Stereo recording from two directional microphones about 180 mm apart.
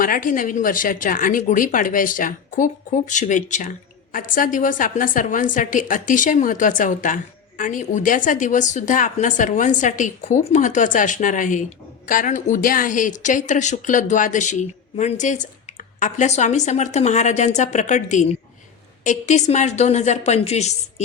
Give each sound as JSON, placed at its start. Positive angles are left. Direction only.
{"t": 0.0, "sound": "a woman's voice", "side_deg": 50}